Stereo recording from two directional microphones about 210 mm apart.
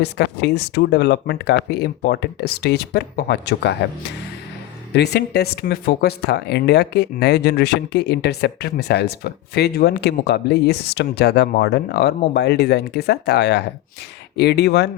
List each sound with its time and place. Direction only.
0.0 s speech: 50° left (ahead or behind)
4.9 s speech: 50° left (ahead or behind)